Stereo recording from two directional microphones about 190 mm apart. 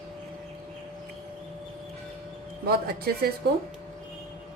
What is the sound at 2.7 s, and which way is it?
Speech, 55° right (ahead or behind).